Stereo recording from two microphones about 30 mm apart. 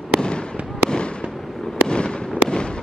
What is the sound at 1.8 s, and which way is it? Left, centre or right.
Fireworks, left.